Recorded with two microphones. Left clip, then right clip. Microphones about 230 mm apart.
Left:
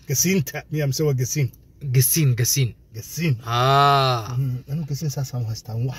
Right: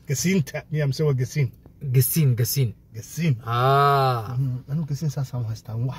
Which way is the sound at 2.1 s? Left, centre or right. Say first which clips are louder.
Left 4 dB; centre.